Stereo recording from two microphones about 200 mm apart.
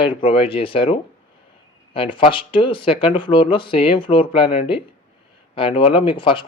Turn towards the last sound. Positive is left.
turn(degrees=25)  # may be behind; listen again after turning